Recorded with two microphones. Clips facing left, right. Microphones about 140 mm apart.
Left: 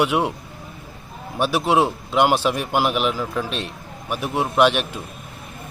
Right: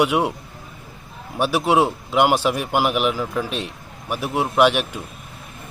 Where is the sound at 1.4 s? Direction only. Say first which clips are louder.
Right 1 dB; 10° right (ahead or behind).